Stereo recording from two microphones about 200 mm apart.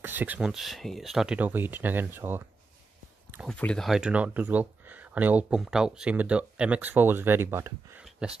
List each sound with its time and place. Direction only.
0.0 s speech: 10° right (ahead or behind)
3.4 s speech: 5° left (ahead or behind)